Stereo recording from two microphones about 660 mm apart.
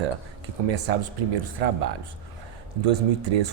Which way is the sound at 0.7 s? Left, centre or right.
Right.